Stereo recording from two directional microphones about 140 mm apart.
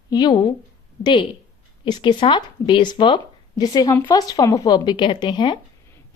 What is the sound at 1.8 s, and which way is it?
A woman's voice, 35° left (ahead or behind).